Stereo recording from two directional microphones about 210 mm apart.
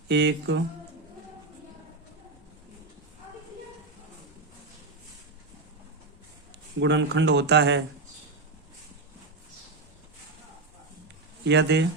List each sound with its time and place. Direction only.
0.1 s speech: 60° right (ahead or behind)
6.7 s speech: 60° right (ahead or behind)
11.4 s speech: 55° right (ahead or behind)